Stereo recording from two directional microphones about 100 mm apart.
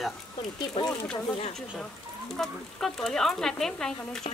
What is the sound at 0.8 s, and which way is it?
Speech, 65° left (ahead or behind).